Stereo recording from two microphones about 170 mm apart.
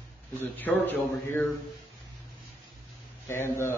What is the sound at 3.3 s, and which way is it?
Speech, 15° left (ahead or behind).